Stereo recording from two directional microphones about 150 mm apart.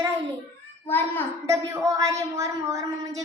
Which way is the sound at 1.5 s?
20° right (ahead or behind).